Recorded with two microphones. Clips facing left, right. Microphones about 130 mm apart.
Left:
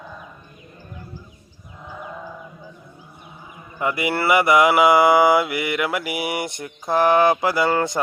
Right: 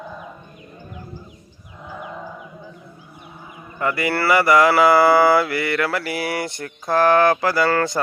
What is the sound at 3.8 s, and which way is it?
Mantra, 15° left (ahead or behind).